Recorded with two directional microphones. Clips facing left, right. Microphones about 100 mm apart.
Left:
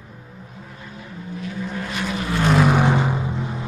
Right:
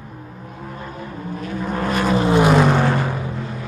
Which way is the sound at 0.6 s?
50° right (ahead or behind).